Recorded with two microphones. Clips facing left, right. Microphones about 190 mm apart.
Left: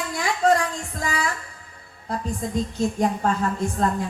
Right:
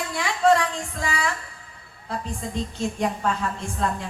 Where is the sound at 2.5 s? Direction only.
40° left (ahead or behind).